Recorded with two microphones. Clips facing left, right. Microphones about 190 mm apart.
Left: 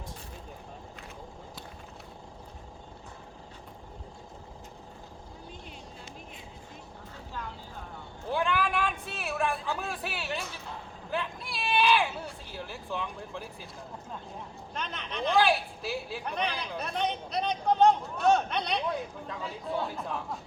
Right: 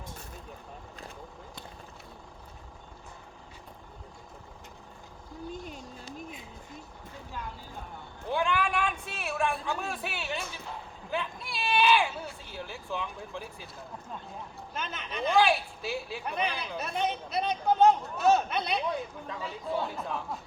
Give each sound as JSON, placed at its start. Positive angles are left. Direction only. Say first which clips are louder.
{"t": 5.6, "sound": "vehicle", "louder": "right 3 dB", "side_deg": -45}
{"t": 8.3, "sound": "a sound", "louder": "even", "side_deg": 0}
{"t": 14.7, "sound": "speech", "louder": "even", "side_deg": -5}